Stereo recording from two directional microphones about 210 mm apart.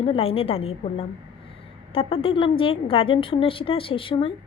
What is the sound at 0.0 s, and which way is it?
A woman's voice, 25° left (ahead or behind).